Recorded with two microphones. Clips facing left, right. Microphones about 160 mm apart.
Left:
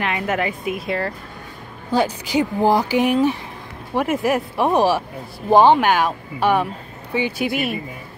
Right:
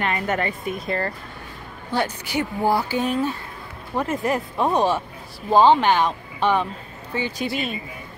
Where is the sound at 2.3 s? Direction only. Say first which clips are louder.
Left 4 dB; 15° left (ahead or behind).